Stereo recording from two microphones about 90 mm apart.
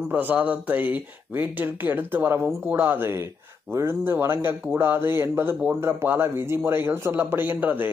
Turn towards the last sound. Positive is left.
turn(degrees=-20)  # may be behind; listen again after turning